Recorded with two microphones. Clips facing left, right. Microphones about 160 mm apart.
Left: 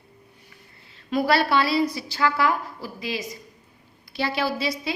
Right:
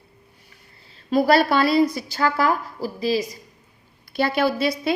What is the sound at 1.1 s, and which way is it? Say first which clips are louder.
A woman's voice: right 4 dB; 45° right (ahead or behind).